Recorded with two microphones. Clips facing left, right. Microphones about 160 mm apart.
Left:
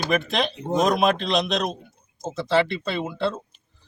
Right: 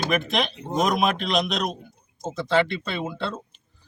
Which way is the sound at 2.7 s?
Centre (ahead or behind).